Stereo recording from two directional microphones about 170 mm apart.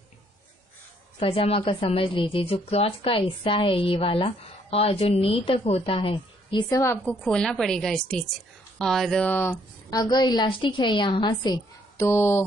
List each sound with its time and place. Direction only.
1.2 s speech: 35° left (ahead or behind); by 7.2 s 15° left (ahead or behind)
7.2 s a woman's voice: 5° left (ahead or behind); by 11.6 s 25° left (ahead or behind)
12.0 s speech: 15° left (ahead or behind)